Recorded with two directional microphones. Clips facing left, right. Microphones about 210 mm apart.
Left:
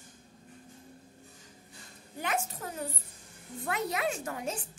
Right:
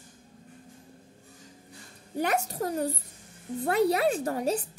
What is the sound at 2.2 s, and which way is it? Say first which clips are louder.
A child's voice: right 7 dB; 40° right (ahead or behind).